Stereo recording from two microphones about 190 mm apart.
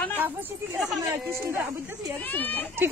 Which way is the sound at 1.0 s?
15° right (ahead or behind).